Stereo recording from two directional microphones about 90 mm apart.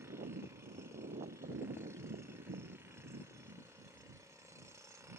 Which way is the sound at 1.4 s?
30° right (ahead or behind).